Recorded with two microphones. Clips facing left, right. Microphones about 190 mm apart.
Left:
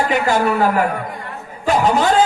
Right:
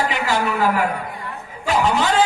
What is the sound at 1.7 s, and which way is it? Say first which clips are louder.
Speech: left 3 dB; 45° left (ahead or behind).